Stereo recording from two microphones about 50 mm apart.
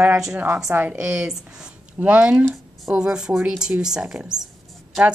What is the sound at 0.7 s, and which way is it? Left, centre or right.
A woman's voice, right.